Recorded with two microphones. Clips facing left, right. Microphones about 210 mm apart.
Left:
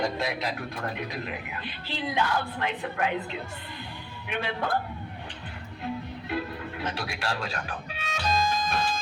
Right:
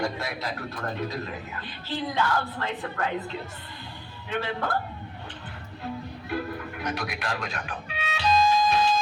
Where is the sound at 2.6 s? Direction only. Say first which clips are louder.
Left 1 dB; 15° left (ahead or behind).